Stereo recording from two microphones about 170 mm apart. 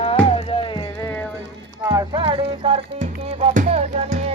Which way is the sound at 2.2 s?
35° right (ahead or behind).